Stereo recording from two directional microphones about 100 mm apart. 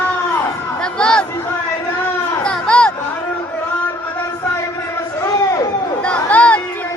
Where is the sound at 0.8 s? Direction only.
10° left (ahead or behind).